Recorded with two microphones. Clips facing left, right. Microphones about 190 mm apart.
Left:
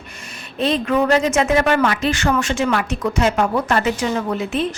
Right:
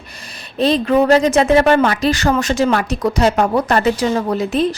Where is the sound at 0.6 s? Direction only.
35° right (ahead or behind).